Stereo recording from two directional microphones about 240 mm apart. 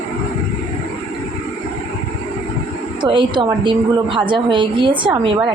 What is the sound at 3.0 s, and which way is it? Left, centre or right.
A woman's voice, centre.